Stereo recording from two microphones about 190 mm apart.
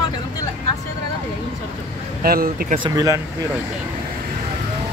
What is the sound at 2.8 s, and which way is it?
Speech, 20° right (ahead or behind).